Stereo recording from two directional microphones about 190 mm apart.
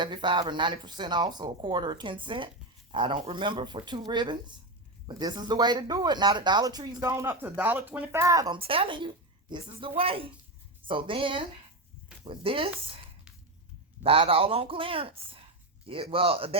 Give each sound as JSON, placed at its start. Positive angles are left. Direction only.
{"t": 0.0, "sound": "speech", "side_deg": -25}
{"t": 14.0, "sound": "speech", "side_deg": -30}